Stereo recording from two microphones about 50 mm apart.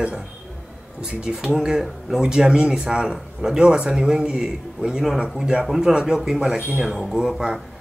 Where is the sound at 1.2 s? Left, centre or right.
Centre.